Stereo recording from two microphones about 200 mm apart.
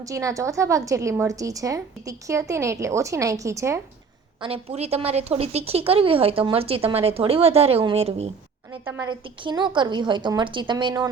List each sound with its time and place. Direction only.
0.0 s a woman's voice: 15° right (ahead or behind)
4.4 s a woman's voice: 30° right (ahead or behind)
8.8 s a woman's voice: 10° right (ahead or behind)
9.0 s a woman's voice: 20° right (ahead or behind)